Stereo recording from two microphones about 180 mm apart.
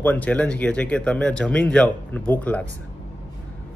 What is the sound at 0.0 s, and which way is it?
Speech, 10° left (ahead or behind).